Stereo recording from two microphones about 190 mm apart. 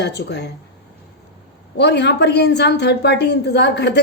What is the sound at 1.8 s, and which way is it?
A woman's voice, 65° left (ahead or behind).